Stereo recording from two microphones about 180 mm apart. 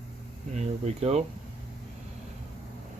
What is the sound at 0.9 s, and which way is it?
Speech, 35° right (ahead or behind).